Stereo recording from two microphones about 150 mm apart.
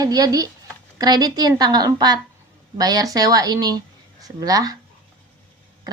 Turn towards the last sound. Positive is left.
turn(degrees=-25)  # may be behind; listen again after turning